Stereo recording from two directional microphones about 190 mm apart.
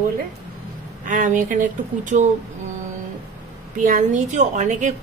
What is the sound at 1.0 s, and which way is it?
Speech, 40° right (ahead or behind).